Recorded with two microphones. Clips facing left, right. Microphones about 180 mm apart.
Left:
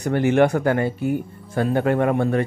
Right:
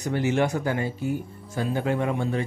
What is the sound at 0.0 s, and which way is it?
A man's voice, 55° left (ahead or behind).